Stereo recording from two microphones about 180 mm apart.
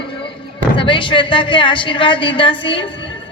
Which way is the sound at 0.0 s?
30° left (ahead or behind).